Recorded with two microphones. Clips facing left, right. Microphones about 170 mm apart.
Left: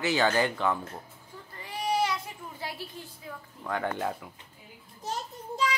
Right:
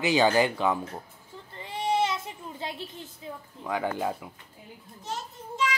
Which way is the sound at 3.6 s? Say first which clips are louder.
Right 2 dB; 5° right (ahead or behind).